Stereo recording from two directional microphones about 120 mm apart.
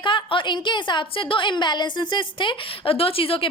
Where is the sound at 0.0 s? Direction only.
45° left (ahead or behind).